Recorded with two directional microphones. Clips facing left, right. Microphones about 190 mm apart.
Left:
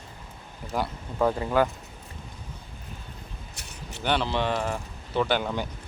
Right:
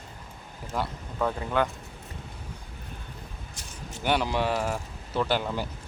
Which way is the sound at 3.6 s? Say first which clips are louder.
Right 1 dB; 65° left (ahead or behind).